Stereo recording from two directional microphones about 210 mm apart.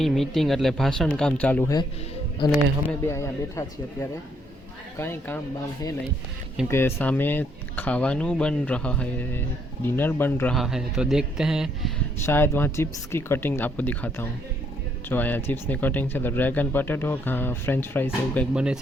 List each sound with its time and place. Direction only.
0.0 s a man's voice: centre (ahead or behind)
2.4 s speech: 20° left (ahead or behind)
6.7 s a man's voice: 10° left (ahead or behind)
12.2 s speech: 10° left (ahead or behind)
18.5 s a man's voice: 5° right (ahead or behind)